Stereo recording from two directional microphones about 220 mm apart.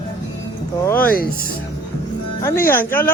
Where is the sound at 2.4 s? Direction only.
10° left (ahead or behind).